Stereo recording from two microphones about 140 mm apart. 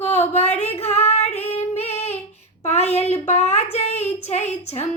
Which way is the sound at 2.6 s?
50° left (ahead or behind).